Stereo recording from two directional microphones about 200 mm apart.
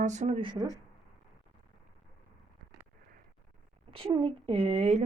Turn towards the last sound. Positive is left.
turn(degrees=-30)  # may be behind; listen again after turning